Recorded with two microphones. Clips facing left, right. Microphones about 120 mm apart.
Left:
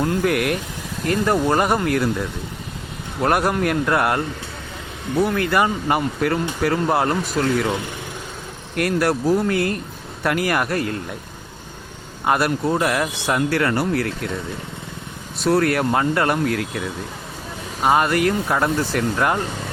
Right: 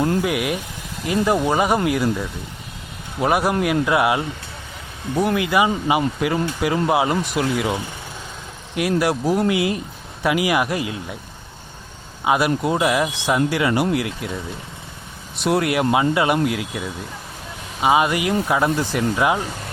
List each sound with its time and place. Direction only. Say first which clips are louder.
0.2 s speech: left 2 dB; 5° right (ahead or behind)
12.2 s speech: right 1 dB; 5° right (ahead or behind)
15.4 s speech: left 1 dB; 20° right (ahead or behind)